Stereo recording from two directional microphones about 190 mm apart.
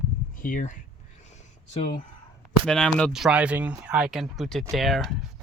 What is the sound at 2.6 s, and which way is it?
Speech, 5° left (ahead or behind).